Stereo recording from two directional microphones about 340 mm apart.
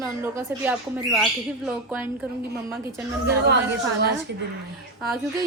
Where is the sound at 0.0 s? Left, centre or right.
Centre.